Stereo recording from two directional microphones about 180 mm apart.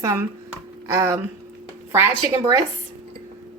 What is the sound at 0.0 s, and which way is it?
A woman's voice, 15° right (ahead or behind).